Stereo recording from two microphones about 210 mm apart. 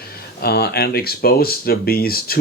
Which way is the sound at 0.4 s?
50° left (ahead or behind).